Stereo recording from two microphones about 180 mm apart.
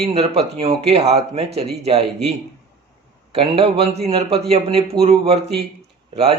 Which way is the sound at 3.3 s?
30° right (ahead or behind).